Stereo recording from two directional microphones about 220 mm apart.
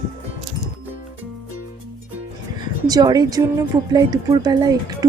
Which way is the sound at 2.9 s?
15° right (ahead or behind).